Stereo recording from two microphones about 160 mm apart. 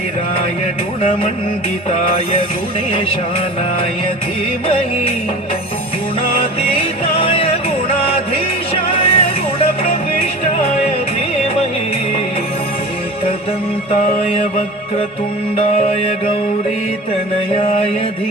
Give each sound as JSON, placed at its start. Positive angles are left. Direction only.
{"t": 6.4, "sound": "music", "side_deg": 35}
{"t": 17.6, "sound": "mantra", "side_deg": 35}